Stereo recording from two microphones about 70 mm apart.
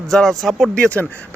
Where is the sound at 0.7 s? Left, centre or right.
Centre.